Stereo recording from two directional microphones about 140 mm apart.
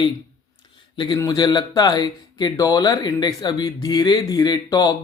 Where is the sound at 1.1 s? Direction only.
30° left (ahead or behind).